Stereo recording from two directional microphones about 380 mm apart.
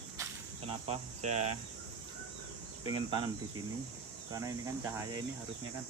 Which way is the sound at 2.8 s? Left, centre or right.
Centre.